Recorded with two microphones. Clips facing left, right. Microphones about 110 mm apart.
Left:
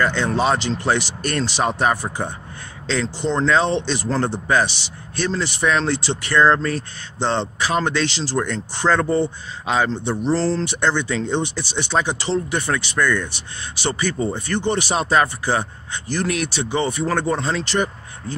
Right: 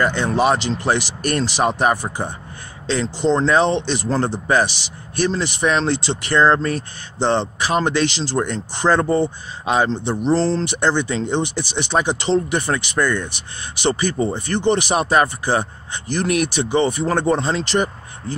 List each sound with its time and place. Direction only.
0.0 s speech: 10° right (ahead or behind)
16.8 s speech: 30° right (ahead or behind)